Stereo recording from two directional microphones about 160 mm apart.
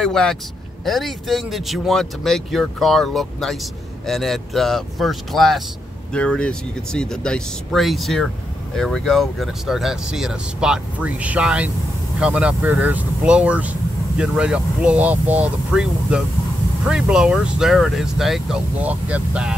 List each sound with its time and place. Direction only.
0.0 s speech: 5° left (ahead or behind)